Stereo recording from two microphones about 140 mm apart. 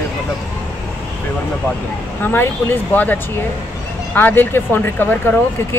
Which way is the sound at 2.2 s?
15° left (ahead or behind).